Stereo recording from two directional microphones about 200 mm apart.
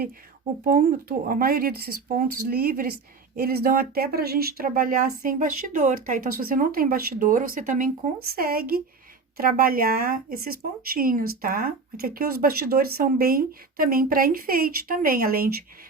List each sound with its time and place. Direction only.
0.6 s speech: 45° right (ahead or behind)